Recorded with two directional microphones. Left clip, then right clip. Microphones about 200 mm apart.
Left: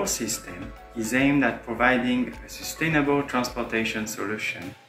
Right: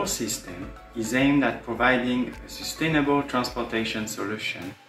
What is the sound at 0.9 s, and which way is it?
Speech, 5° left (ahead or behind).